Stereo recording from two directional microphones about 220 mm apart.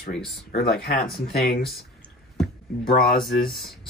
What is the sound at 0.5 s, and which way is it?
Speech, 45° left (ahead or behind).